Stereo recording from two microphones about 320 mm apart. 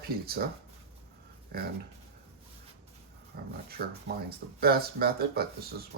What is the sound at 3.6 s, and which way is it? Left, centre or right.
Speech, right.